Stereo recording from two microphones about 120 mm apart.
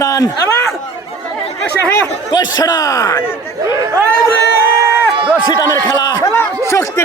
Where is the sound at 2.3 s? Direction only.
35° left (ahead or behind).